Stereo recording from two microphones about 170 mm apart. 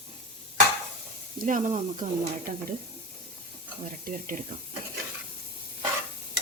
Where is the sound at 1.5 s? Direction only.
50° right (ahead or behind).